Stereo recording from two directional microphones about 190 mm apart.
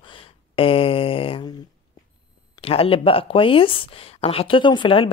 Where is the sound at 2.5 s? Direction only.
30° left (ahead or behind).